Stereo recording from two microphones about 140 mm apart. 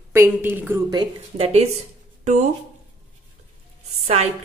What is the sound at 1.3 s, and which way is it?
Speech, 45° right (ahead or behind).